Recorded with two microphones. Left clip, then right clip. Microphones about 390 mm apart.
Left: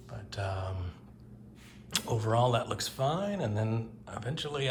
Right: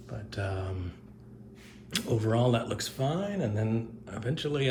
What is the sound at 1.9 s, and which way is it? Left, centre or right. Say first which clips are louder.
Speech: right 1 dB; centre.